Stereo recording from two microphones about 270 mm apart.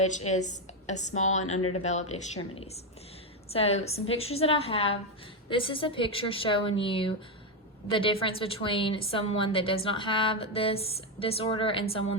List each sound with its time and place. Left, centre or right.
0.0 s a woman's voice: left